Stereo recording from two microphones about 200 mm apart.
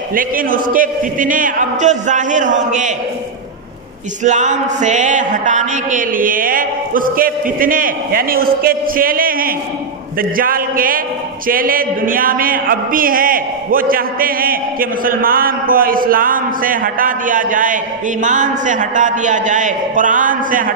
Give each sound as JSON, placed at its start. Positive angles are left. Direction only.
{"t": 0.1, "sound": "a man's voice", "side_deg": -45}
{"t": 4.2, "sound": "a man's voice", "side_deg": -35}